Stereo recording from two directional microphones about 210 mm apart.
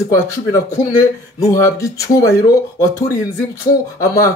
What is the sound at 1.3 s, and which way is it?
Speech, 15° left (ahead or behind).